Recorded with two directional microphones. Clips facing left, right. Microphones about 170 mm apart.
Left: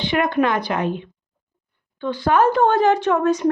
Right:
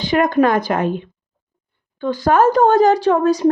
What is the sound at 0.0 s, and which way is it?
A woman's voice, 45° right (ahead or behind).